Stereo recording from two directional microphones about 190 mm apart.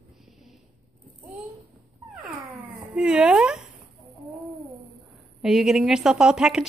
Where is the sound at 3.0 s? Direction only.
5° right (ahead or behind).